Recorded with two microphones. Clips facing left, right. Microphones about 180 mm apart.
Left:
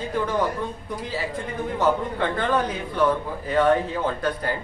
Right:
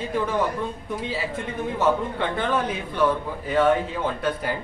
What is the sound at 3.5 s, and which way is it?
Speech, centre (ahead or behind).